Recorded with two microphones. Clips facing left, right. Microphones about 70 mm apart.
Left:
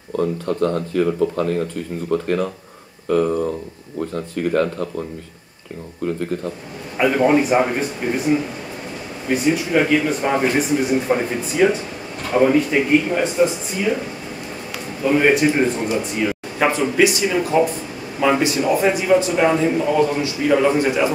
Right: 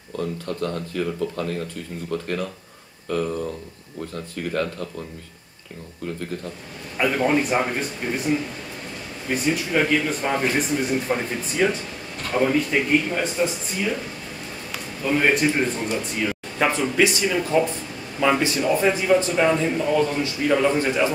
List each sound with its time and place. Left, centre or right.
0.2 s speech: left
4.5 s speech: left
7.0 s a man's voice: centre